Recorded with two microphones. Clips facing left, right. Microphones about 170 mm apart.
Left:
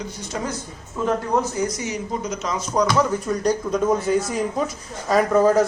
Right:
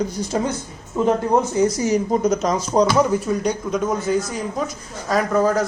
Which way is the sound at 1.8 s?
40° right (ahead or behind).